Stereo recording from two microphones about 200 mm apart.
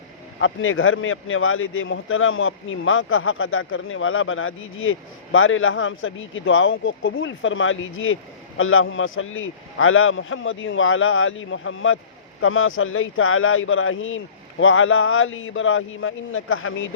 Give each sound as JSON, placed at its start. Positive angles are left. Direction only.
{"t": 0.3, "sound": "a man's voice", "side_deg": 85}
{"t": 12.4, "sound": "a man's voice", "side_deg": 90}